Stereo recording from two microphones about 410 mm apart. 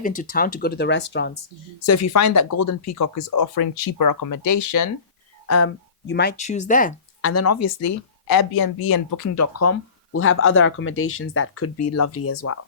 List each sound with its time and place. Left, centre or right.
0.2 s speech: left
1.9 s speech: left
5.5 s speech: left
7.2 s speech: left
8.4 s speech: left